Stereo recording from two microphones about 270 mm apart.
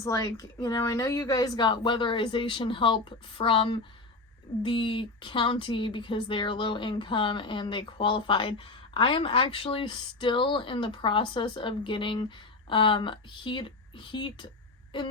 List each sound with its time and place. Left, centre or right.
0.0 s speech: centre